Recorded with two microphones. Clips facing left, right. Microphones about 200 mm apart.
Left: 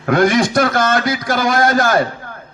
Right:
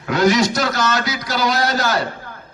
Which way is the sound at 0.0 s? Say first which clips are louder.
Left 2 dB; 55° left (ahead or behind).